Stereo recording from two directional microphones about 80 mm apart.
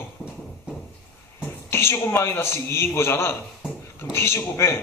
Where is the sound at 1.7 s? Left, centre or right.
Left.